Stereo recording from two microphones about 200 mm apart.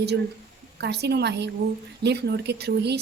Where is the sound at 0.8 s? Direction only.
55° right (ahead or behind).